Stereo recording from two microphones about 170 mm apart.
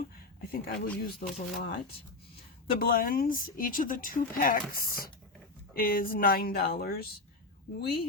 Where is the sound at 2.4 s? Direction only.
60° left (ahead or behind).